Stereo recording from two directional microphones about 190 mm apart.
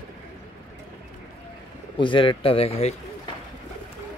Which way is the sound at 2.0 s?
25° left (ahead or behind).